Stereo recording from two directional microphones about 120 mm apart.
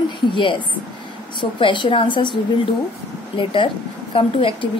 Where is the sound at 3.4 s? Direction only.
45° left (ahead or behind).